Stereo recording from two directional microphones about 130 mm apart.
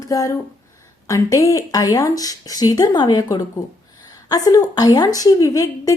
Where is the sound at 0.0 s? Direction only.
25° left (ahead or behind).